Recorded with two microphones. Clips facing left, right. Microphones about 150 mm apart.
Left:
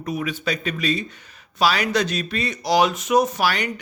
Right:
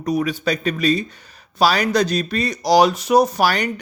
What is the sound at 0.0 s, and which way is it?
A man's voice, 40° right (ahead or behind).